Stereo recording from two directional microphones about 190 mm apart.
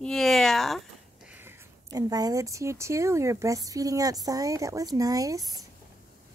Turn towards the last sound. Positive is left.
turn(degrees=-20)  # may be behind; listen again after turning